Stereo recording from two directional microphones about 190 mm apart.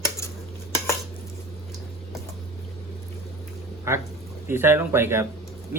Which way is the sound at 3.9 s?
15° right (ahead or behind).